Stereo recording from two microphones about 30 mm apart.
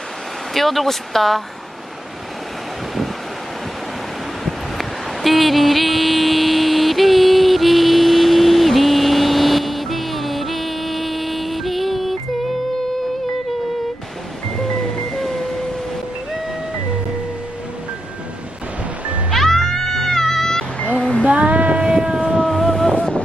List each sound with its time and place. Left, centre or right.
0.5 s speech: centre
4.4 s a sound: centre
19.3 s music: centre
20.9 s music: left
21.2 s child singing: right
21.8 s vehicle: right
22.4 s boat: centre